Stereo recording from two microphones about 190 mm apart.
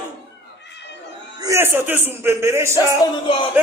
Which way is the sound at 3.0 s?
25° left (ahead or behind).